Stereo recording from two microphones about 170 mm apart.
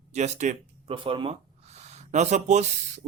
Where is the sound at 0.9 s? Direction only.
30° right (ahead or behind).